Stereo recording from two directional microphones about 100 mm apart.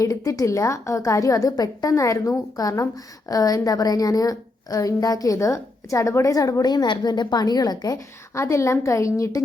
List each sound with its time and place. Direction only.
0.0 s a woman's voice: 35° left (ahead or behind)
8.4 s a woman's voice: 30° left (ahead or behind)